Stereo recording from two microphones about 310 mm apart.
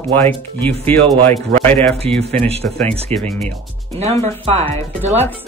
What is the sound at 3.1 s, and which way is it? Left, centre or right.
Speech, centre.